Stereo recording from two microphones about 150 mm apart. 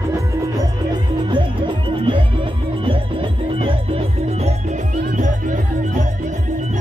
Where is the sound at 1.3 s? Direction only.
35° right (ahead or behind).